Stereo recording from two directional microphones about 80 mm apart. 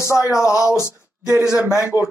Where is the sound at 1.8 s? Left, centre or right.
Right.